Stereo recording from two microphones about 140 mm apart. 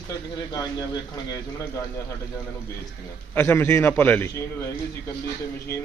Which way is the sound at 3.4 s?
15° left (ahead or behind).